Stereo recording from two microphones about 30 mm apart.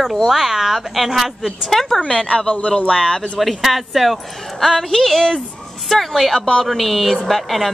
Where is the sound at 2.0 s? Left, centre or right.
Left.